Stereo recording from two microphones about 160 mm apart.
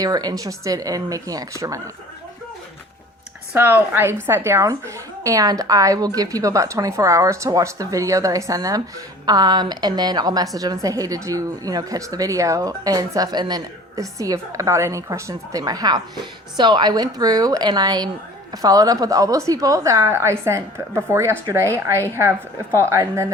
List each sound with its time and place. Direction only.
0.0 s a woman's voice: 25° right (ahead or behind)
3.5 s a woman's voice: 15° right (ahead or behind)